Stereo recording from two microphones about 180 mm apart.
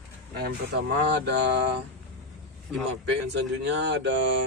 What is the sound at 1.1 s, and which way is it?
Speech, 70° right (ahead or behind).